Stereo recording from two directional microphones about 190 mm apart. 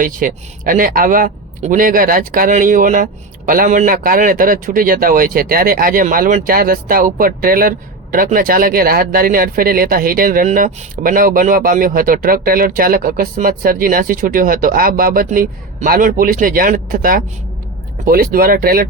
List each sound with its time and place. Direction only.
0.0 s speech: 45° right (ahead or behind)